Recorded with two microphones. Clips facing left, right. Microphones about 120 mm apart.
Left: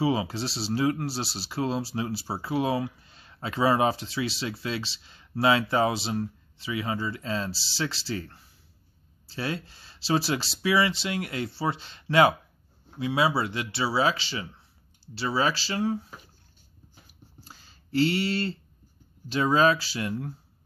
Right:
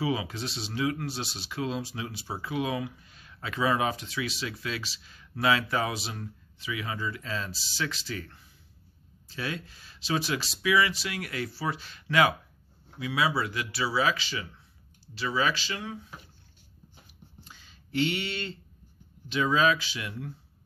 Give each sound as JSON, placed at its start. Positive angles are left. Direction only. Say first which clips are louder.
{"t": 0.0, "sound": "speech", "louder": "left 4 dB", "side_deg": 30}
{"t": 17.4, "sound": "a sound", "louder": "left 3 dB", "side_deg": 40}
{"t": 19.2, "sound": "speech", "louder": "left 3 dB", "side_deg": 35}